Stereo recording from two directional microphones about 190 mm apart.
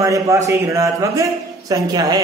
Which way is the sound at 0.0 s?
15° right (ahead or behind).